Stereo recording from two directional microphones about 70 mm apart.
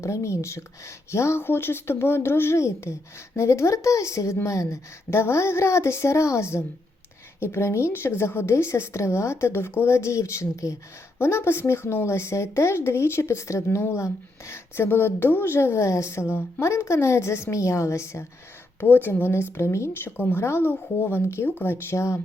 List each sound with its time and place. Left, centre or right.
0.0 s speech: left
11.2 s speech: left
18.8 s speech: left